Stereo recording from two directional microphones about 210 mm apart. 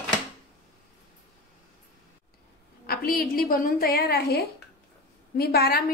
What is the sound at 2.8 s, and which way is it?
A woman's voice, 45° left (ahead or behind).